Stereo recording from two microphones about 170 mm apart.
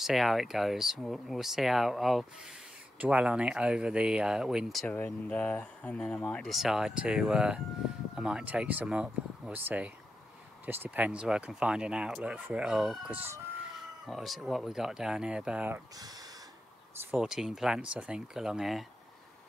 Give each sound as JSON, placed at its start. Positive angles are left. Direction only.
{"t": 0.0, "sound": "speech", "side_deg": 0}
{"t": 16.0, "sound": "speech", "side_deg": -20}
{"t": 17.0, "sound": "speech", "side_deg": -10}